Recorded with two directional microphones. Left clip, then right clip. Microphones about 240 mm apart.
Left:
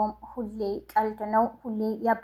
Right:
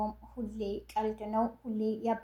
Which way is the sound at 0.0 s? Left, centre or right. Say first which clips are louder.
Left 8 dB; left.